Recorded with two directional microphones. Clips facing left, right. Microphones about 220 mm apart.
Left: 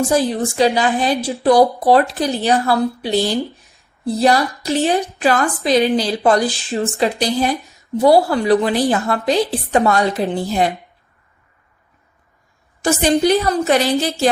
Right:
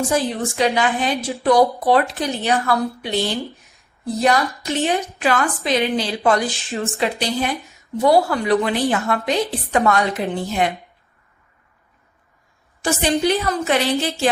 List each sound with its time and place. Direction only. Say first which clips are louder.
0.4 s a woman's voice: left 3 dB; 30° left (ahead or behind)
12.8 s a woman's voice: left 4 dB; 45° left (ahead or behind)